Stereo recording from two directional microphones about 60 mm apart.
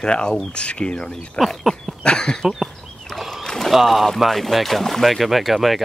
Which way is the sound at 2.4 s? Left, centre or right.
Centre.